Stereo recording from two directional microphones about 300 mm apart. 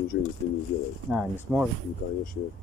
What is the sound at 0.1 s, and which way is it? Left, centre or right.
Speech, left.